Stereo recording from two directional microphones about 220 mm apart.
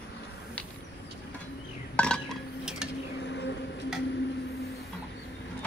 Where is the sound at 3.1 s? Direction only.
55° left (ahead or behind).